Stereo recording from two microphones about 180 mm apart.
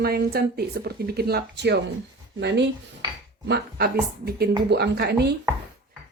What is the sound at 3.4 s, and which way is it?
Speech, 65° right (ahead or behind).